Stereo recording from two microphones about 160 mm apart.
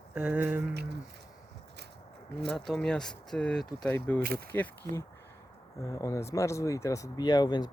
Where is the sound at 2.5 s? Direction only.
5° left (ahead or behind).